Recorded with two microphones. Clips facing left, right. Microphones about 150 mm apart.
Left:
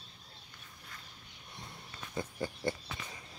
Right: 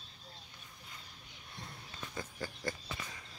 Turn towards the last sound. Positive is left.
turn(degrees=25)  # may be behind; listen again after turning